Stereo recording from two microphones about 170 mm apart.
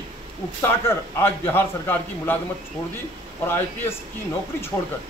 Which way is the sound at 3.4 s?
15° left (ahead or behind).